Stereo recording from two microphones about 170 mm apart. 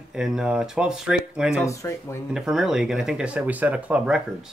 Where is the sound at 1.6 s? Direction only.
15° left (ahead or behind).